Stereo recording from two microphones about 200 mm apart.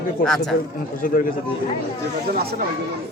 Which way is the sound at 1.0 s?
45° left (ahead or behind).